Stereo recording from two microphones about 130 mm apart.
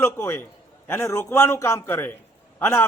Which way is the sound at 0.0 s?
15° left (ahead or behind).